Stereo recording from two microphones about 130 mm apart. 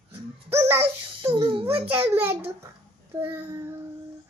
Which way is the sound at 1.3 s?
45° right (ahead or behind).